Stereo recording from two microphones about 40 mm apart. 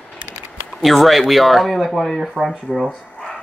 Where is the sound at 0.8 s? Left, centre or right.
Centre.